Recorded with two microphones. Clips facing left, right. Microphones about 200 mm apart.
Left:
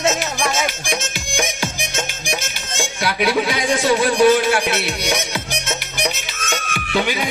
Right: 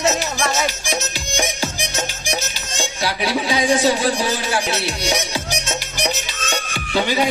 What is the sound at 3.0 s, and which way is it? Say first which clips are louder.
A man's voice: left 3 dB; 55° left (ahead or behind).